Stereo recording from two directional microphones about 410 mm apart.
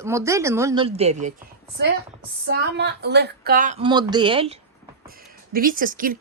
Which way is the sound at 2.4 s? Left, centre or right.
Right.